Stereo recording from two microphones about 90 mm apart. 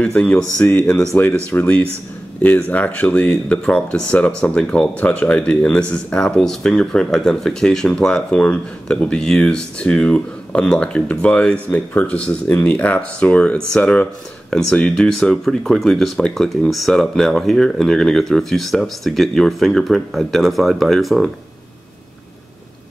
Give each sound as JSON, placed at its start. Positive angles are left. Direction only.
{"t": 0.0, "sound": "speech", "side_deg": 15}